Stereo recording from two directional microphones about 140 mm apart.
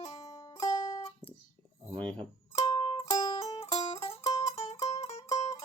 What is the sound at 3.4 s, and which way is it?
Music, 45° left (ahead or behind).